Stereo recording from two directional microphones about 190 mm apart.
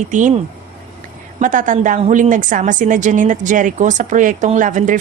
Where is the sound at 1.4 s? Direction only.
40° right (ahead or behind).